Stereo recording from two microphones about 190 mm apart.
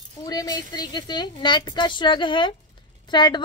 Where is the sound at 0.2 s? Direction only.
20° left (ahead or behind).